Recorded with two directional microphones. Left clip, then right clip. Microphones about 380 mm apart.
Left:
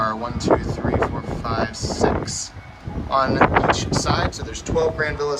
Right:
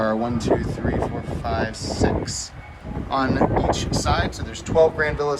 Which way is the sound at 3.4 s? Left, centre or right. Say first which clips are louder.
Left 6 dB; right.